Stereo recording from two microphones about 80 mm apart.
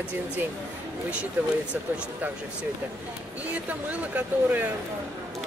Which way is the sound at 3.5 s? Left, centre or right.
Right.